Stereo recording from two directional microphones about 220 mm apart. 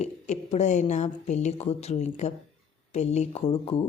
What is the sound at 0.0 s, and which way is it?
Speech, 30° left (ahead or behind).